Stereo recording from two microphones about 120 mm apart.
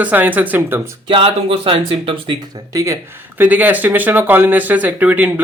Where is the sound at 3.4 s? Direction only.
15° right (ahead or behind).